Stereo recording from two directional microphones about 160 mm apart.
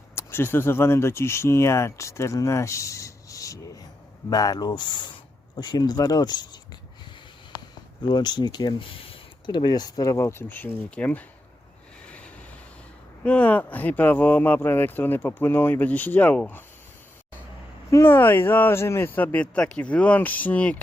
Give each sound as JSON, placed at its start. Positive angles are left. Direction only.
{"t": 0.2, "sound": "speech", "side_deg": 15}
{"t": 8.0, "sound": "speech", "side_deg": 30}
{"t": 12.1, "sound": "vehicle", "side_deg": 10}
{"t": 13.2, "sound": "speech", "side_deg": 10}
{"t": 17.9, "sound": "speech", "side_deg": 15}